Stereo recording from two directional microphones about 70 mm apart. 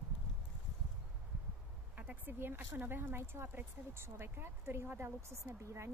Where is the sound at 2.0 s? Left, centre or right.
Right.